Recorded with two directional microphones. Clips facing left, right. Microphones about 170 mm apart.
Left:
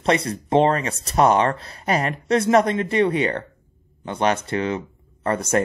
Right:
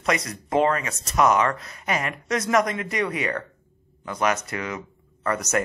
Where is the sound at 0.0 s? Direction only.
30° left (ahead or behind).